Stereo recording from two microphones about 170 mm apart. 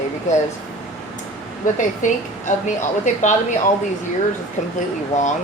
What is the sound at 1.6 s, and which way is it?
Speech, 50° left (ahead or behind).